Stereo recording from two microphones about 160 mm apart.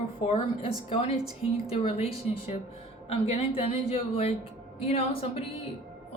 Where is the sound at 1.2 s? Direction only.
5° right (ahead or behind).